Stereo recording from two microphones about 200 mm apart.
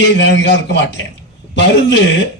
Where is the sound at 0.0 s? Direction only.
60° left (ahead or behind).